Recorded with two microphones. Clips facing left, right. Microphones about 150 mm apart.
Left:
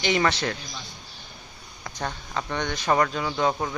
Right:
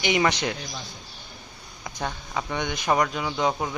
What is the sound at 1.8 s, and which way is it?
Speech, 10° right (ahead or behind).